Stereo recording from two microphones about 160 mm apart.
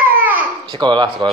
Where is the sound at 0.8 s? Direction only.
30° right (ahead or behind).